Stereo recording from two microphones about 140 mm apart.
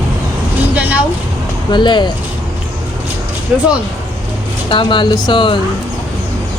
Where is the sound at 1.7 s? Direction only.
35° left (ahead or behind).